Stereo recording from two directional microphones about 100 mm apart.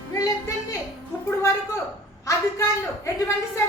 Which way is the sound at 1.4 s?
30° left (ahead or behind).